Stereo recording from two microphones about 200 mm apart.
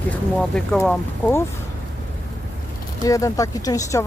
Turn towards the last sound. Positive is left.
turn(degrees=15)  # may be behind; listen again after turning